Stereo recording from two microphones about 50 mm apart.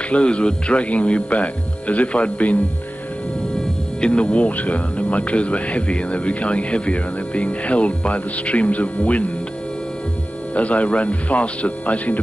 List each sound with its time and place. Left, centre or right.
0.1 s speech: left
4.0 s speech: left
10.5 s speech: left